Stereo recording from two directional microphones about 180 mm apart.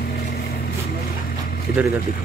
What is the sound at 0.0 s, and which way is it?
Vehicle, 55° left (ahead or behind).